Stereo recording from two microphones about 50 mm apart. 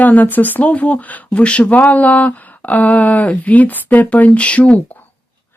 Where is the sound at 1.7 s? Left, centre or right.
Left.